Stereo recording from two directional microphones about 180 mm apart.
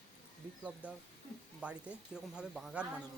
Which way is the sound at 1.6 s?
5° right (ahead or behind).